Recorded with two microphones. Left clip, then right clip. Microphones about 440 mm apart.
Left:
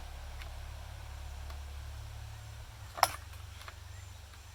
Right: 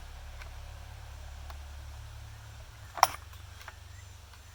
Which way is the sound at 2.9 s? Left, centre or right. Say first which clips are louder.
Right 4 dB; centre.